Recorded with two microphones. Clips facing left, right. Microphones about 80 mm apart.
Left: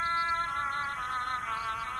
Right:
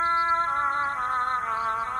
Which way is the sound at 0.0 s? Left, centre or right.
Right.